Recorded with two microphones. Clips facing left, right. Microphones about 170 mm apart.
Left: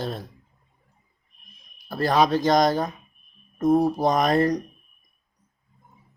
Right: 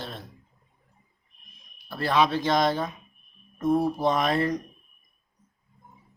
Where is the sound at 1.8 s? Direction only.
40° left (ahead or behind).